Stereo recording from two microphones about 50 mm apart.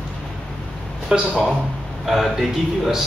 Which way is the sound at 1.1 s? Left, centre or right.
Centre.